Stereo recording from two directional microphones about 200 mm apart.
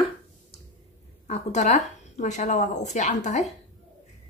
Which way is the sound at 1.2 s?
35° left (ahead or behind).